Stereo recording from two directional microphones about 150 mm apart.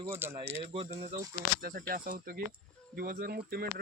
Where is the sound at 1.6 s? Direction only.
80° right.